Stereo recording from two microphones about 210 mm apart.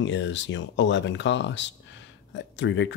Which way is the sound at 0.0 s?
60° left (ahead or behind).